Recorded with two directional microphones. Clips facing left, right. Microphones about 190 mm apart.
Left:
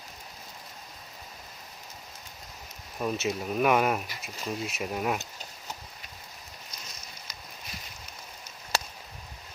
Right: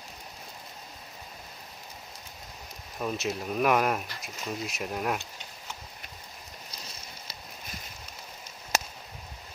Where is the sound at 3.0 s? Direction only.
Centre (ahead or behind).